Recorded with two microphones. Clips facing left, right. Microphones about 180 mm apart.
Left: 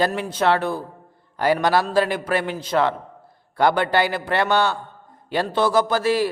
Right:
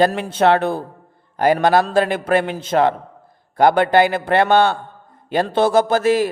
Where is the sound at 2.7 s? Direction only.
50° right (ahead or behind).